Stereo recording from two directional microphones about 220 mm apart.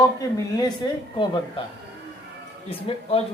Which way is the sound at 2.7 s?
25° left (ahead or behind).